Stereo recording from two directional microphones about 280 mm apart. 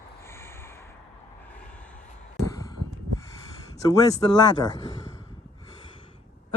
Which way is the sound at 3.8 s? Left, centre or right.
Centre.